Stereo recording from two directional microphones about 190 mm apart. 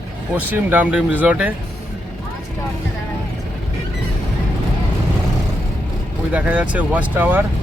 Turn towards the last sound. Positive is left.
turn(degrees=-10)  # may be behind; listen again after turning